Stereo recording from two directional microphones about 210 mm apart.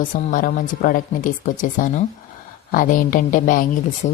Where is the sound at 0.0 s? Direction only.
40° left (ahead or behind).